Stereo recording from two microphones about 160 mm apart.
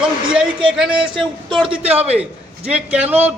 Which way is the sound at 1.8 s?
40° right (ahead or behind).